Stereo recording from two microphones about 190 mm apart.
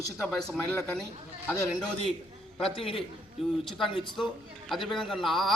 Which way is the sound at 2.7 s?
30° left (ahead or behind).